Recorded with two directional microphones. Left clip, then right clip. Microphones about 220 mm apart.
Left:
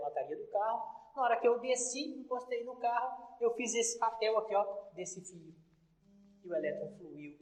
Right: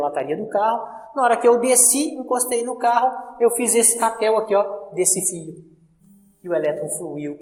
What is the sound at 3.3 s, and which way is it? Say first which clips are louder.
A man's voice: right 13 dB; 25° right (ahead or behind).